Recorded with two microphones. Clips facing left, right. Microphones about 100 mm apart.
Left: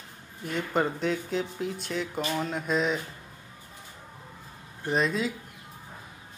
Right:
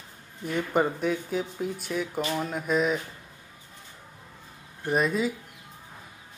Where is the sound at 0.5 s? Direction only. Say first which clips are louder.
Right 2 dB; 10° right (ahead or behind).